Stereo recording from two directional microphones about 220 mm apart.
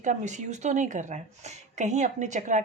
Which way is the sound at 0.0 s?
35° right (ahead or behind).